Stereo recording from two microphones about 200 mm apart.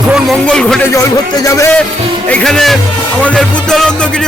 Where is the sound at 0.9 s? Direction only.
15° left (ahead or behind).